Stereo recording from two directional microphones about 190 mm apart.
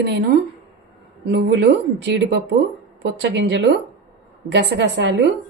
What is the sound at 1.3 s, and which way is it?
A woman's voice, 60° right (ahead or behind).